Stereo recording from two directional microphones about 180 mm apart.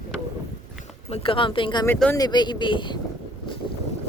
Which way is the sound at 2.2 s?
25° left (ahead or behind).